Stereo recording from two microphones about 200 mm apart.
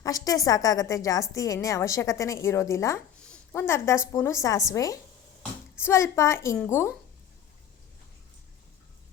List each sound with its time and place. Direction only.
0.0 s a woman's voice: 15° left (ahead or behind)